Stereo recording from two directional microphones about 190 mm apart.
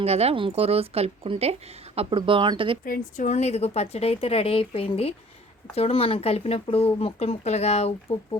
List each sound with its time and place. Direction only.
0.0 s a woman's voice: 30° right (ahead or behind)
2.8 s speech: 45° left (ahead or behind)